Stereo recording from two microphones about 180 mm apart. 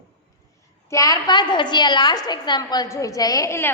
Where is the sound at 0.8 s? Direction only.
20° left (ahead or behind).